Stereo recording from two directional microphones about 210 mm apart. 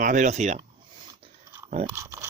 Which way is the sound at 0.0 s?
35° right (ahead or behind).